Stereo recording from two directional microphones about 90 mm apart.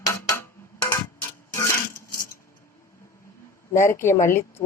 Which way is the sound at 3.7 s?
30° left (ahead or behind).